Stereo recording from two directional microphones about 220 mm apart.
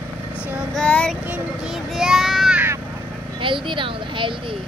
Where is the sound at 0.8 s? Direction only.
5° left (ahead or behind).